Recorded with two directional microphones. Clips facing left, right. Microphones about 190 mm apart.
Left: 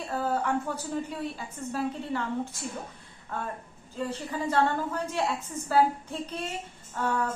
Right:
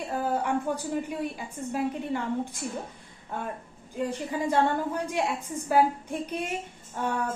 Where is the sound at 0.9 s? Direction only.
15° right (ahead or behind).